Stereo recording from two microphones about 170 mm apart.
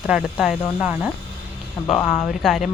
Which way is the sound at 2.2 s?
Centre (ahead or behind).